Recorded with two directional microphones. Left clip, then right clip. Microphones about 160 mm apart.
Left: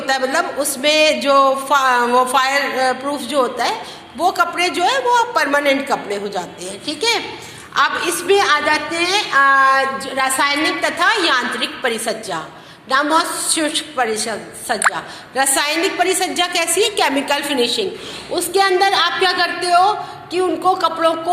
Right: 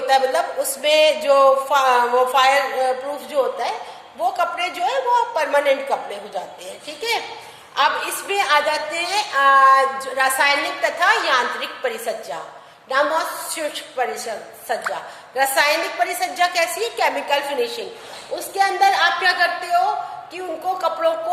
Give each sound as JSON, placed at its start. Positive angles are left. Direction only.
{"t": 0.1, "sound": "a man's voice", "side_deg": -10}
{"t": 11.0, "sound": "a man's voice", "side_deg": -10}
{"t": 18.3, "sound": "a woman's voice", "side_deg": -20}